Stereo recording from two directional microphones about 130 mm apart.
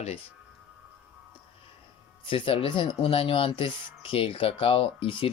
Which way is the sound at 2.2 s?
45° left (ahead or behind).